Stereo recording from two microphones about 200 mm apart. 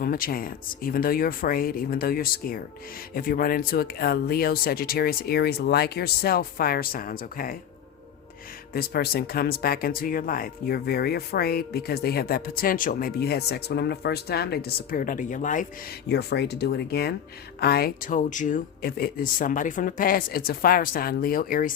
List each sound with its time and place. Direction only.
0.0 s speech: 45° left (ahead or behind)
8.7 s speech: 50° left (ahead or behind)
16.0 s speech: 55° left (ahead or behind)